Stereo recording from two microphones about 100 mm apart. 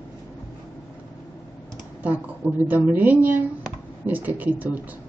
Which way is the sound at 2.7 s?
20° right (ahead or behind).